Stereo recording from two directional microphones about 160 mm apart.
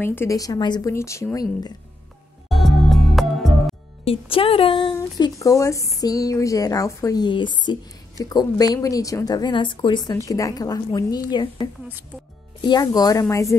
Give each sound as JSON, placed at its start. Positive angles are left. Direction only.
{"t": 0.0, "sound": "a woman's voice", "side_deg": 15}
{"t": 2.5, "sound": "music", "side_deg": 0}
{"t": 4.0, "sound": "a woman's voice", "side_deg": 35}
{"t": 5.4, "sound": "a woman's voice", "side_deg": 20}